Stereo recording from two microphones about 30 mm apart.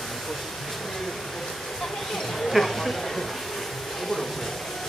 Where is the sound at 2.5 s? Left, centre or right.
Centre.